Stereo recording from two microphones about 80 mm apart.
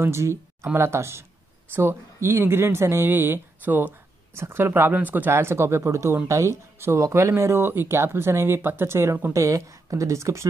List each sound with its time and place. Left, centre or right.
0.0 s speech: right